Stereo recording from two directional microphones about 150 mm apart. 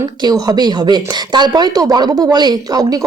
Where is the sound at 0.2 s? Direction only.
25° right (ahead or behind).